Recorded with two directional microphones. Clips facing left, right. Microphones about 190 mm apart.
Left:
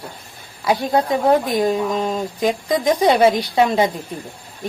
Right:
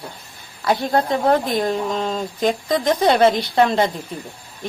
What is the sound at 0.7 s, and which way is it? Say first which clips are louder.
Speech: left 1 dB; 10° left (ahead or behind).